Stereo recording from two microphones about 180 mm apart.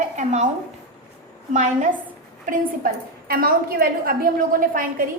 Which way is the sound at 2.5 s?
55° right (ahead or behind).